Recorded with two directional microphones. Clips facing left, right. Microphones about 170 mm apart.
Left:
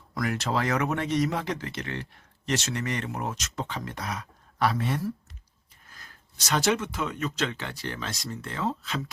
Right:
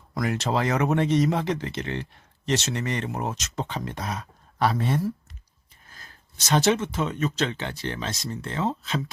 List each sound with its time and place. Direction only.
0.1 s speech: 25° right (ahead or behind)
6.5 s speech: 25° right (ahead or behind)